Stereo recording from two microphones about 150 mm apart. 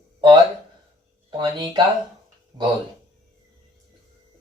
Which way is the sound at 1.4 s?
30° right (ahead or behind).